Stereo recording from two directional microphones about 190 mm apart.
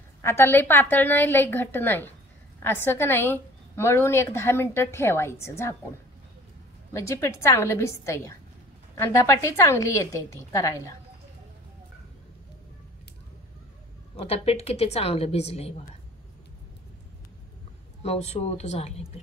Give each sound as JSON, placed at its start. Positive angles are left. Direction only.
{"t": 0.2, "sound": "a woman's voice", "side_deg": 15}
{"t": 6.9, "sound": "a woman's voice", "side_deg": 15}
{"t": 14.2, "sound": "a woman's voice", "side_deg": 30}
{"t": 18.0, "sound": "a woman's voice", "side_deg": 35}